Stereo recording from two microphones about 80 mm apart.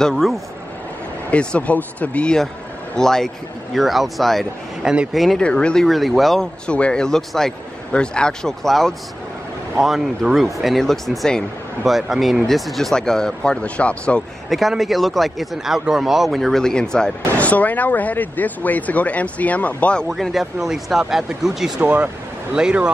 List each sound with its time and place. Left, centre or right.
0.0 s speech: centre
1.3 s speech: centre
4.8 s speech: centre
5.1 s speech: centre
5.4 s speech: centre
5.9 s speech: centre
6.7 s speech: centre
14.5 s speech: centre
17.4 s speech: centre
20.1 s speech: centre
21.8 s speech: centre